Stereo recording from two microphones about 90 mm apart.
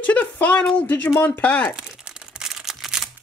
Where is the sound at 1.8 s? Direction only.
10° right (ahead or behind).